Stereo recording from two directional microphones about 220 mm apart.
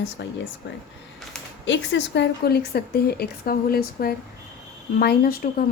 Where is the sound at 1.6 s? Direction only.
55° left (ahead or behind).